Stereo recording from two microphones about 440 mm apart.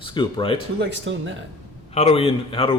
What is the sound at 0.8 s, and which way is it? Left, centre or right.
Speech, right.